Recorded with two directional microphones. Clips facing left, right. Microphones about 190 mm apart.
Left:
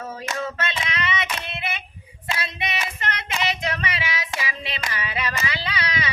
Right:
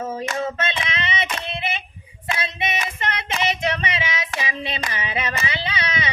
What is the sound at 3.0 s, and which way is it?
Child singing, 20° right (ahead or behind).